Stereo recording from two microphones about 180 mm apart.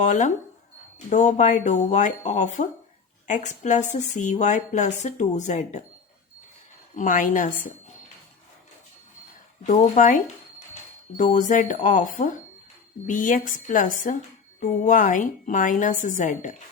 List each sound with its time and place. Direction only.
0.0 s a woman's voice: 45° left (ahead or behind)
6.9 s a woman's voice: 45° left (ahead or behind)
9.6 s a woman's voice: 40° left (ahead or behind)